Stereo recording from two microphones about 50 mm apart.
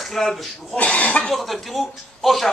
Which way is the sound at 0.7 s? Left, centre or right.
Left.